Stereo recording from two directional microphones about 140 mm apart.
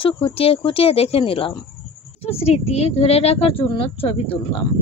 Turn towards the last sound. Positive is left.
turn(degrees=40)  # may be behind; listen again after turning